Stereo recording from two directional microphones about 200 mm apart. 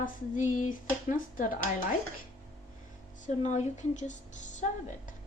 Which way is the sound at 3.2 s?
35° left (ahead or behind).